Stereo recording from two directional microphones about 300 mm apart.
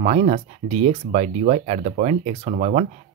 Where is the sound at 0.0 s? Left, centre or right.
Right.